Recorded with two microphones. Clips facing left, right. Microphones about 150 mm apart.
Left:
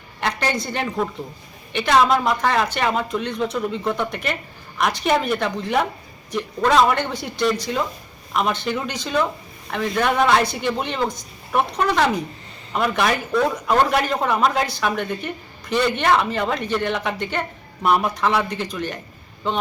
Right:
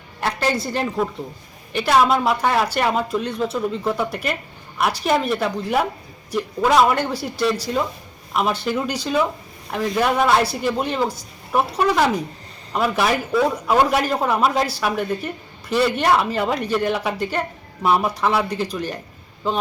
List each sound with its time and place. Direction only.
0.2 s speech: 5° right (ahead or behind)
18.7 s speech: 35° right (ahead or behind)